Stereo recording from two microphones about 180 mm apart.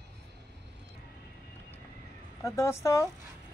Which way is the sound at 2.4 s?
15° left (ahead or behind).